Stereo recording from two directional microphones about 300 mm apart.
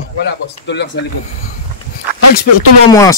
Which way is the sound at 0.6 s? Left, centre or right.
Left.